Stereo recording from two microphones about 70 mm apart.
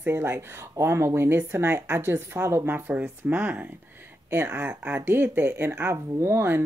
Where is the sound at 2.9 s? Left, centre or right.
Right.